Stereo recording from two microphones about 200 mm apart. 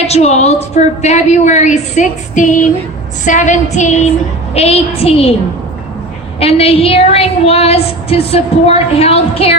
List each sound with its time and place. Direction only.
0.0 s a woman's voice: 35° left (ahead or behind)
6.4 s a woman's voice: 30° left (ahead or behind)